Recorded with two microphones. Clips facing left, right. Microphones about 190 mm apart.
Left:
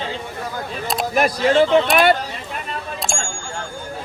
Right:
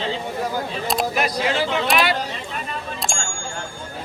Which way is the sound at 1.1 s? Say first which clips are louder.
Left 5 dB; 50° left (ahead or behind).